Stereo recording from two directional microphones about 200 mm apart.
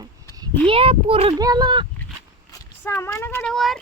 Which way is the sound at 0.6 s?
30° right (ahead or behind).